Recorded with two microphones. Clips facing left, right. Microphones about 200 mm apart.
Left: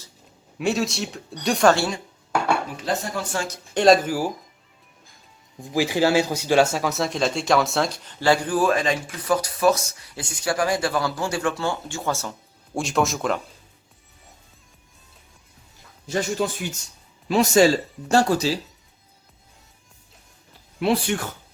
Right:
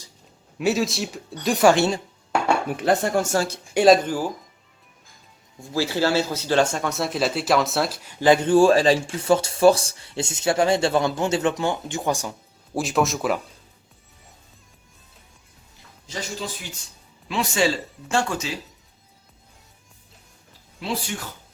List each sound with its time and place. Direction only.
0.6 s speech: centre (ahead or behind)
2.6 s speech: 60° right (ahead or behind); by 3.6 s 35° right (ahead or behind)
3.8 s speech: centre (ahead or behind)
5.5 s speech: 15° left (ahead or behind); by 12.3 s 15° right (ahead or behind)
12.7 s speech: centre (ahead or behind)
16.0 s speech: 55° left (ahead or behind)
17.2 s speech: 40° left (ahead or behind)
20.7 s speech: 60° left (ahead or behind)